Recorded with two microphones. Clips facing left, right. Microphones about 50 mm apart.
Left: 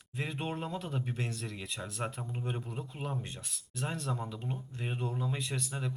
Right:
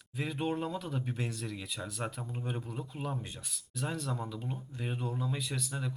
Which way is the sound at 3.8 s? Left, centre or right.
Centre.